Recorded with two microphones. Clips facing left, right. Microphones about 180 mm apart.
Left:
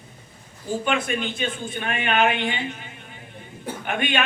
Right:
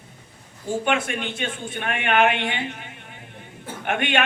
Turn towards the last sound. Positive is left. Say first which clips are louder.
# right 1 dB
turn(degrees=-70)  # may be behind; listen again after turning